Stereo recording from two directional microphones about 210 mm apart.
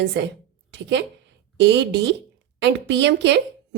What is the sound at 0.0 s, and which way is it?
A woman's voice, 55° right (ahead or behind).